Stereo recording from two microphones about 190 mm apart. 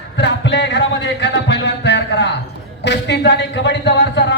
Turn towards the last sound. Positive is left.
turn(degrees=65)  # may be behind; listen again after turning